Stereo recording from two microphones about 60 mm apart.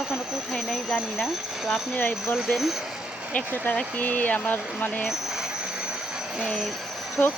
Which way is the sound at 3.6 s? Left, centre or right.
Left.